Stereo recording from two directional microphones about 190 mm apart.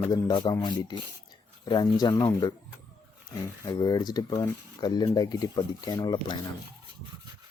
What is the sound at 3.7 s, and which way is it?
Speech, 20° left (ahead or behind).